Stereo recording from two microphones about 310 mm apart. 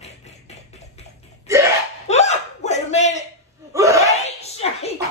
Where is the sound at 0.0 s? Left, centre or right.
Left.